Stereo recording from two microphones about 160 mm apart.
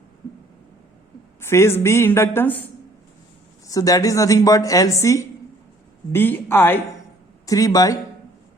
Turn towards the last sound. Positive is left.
turn(degrees=20)  # may be behind; listen again after turning